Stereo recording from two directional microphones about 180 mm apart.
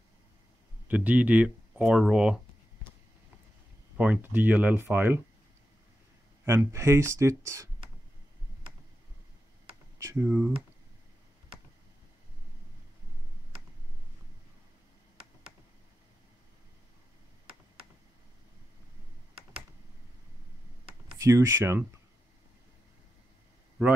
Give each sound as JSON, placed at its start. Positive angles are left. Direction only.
{"t": 0.8, "sound": "speech", "side_deg": -10}
{"t": 4.0, "sound": "speech", "side_deg": -10}
{"t": 6.4, "sound": "speech", "side_deg": -15}
{"t": 9.9, "sound": "speech", "side_deg": -15}
{"t": 21.2, "sound": "speech", "side_deg": -15}